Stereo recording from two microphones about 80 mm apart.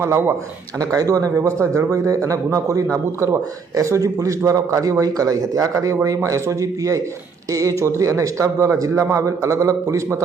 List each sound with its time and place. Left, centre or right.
0.0 s a man's voice: right
0.8 s a man's voice: right